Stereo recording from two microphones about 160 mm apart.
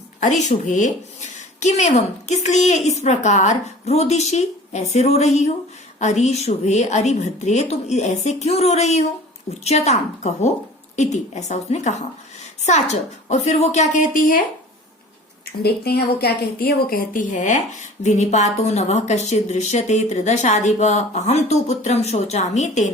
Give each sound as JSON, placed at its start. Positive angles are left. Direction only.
{"t": 0.2, "sound": "speech", "side_deg": 50}
{"t": 15.6, "sound": "speech", "side_deg": 75}